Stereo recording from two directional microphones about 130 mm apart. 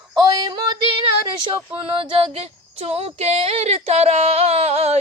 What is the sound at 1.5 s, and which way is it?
Speech, 45° right (ahead or behind).